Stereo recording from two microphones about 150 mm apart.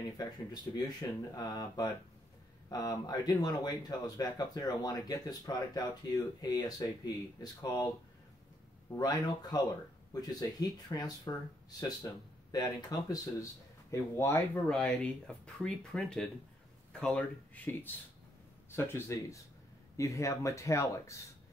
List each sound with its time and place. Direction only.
0.2 s speech: 25° left (ahead or behind)
8.9 s speech: 25° left (ahead or behind)
14.7 s speech: 5° left (ahead or behind)